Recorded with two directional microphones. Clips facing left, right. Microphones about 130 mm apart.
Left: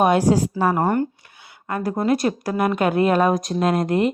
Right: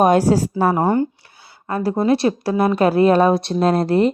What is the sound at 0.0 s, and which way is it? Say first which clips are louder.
Speech: right 2 dB; 40° right (ahead or behind).